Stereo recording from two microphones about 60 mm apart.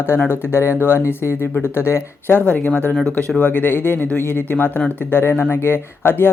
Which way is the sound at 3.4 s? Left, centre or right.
Left.